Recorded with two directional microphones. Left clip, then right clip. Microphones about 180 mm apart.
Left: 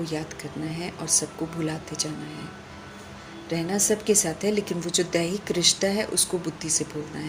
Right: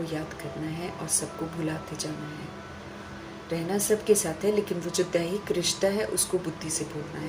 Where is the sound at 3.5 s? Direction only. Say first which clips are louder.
Left 2 dB; 45° left (ahead or behind).